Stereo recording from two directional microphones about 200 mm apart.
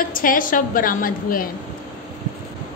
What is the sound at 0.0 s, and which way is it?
A woman's voice, 45° left (ahead or behind).